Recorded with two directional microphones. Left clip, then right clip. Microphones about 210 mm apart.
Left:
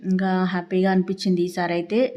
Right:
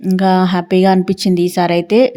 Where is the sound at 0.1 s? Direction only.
35° right (ahead or behind).